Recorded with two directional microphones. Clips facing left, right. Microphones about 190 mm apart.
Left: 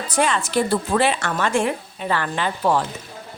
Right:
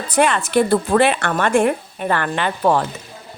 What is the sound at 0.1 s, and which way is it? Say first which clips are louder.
A woman's voice: right 5 dB; 60° right (ahead or behind).